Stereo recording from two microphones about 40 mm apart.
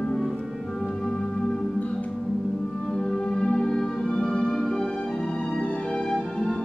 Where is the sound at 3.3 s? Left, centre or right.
Left.